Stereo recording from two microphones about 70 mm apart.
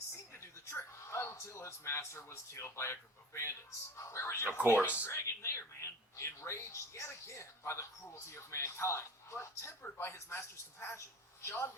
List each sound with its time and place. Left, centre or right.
0.3 s a sound: left
3.9 s speech: left
4.5 s speech: right
4.8 s a man's voice: left